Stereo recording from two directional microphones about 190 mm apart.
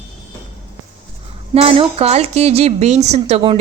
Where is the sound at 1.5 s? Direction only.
30° right (ahead or behind).